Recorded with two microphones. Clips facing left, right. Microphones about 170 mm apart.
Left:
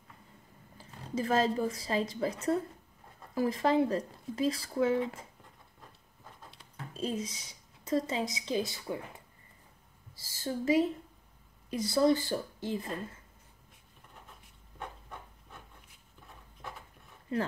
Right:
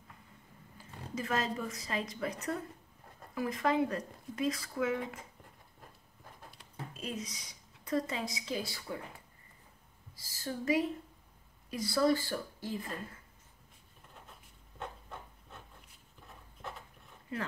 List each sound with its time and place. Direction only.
0.7 s a woman's voice: 30° left (ahead or behind)
6.9 s speech: 30° left (ahead or behind)
10.1 s speech: 25° left (ahead or behind)